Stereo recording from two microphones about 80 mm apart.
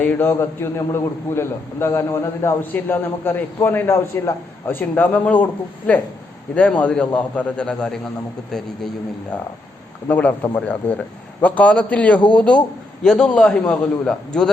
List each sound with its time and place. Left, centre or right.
0.0 s a man's voice: left
0.3 s a man's voice: left
2.6 s a man's voice: left
10.1 s a man's voice: left; by 14.5 s centre